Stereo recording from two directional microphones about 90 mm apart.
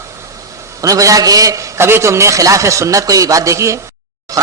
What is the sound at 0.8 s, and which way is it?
A man's voice, 40° right (ahead or behind).